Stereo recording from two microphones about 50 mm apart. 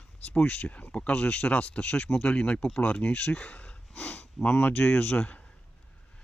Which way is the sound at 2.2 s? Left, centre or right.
Left.